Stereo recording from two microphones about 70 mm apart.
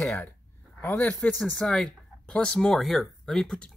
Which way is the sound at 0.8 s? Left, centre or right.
Left.